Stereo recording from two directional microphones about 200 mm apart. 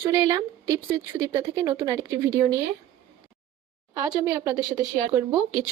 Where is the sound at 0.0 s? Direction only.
15° right (ahead or behind).